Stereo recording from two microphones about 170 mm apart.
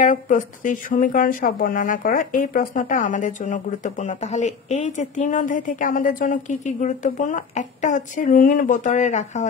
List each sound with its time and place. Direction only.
0.0 s speech: 50° left (ahead or behind)